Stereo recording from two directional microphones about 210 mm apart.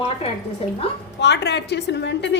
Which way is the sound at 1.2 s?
55° left (ahead or behind).